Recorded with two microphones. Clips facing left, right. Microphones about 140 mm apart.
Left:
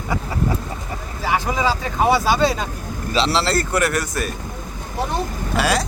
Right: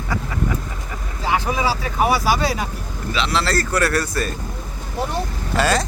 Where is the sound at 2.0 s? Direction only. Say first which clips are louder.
Left 3 dB; 25° left (ahead or behind).